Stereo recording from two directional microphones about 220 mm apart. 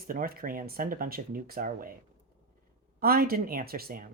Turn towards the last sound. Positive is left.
turn(degrees=-40)  # may be behind; listen again after turning